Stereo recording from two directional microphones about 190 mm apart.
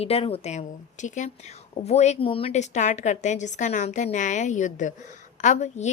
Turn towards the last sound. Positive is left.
turn(degrees=40)  # may be behind; listen again after turning